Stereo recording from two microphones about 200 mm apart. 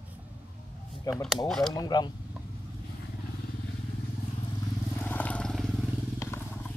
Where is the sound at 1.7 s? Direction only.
20° left (ahead or behind).